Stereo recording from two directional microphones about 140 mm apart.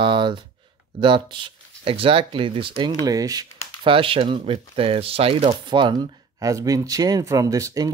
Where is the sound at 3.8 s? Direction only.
40° right (ahead or behind).